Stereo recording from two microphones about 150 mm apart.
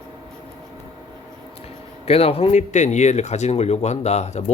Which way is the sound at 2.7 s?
50° left (ahead or behind).